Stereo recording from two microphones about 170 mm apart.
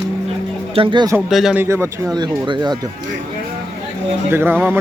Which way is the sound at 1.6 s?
15° right (ahead or behind).